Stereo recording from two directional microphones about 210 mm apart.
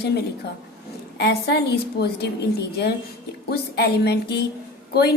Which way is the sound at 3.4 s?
50° left (ahead or behind).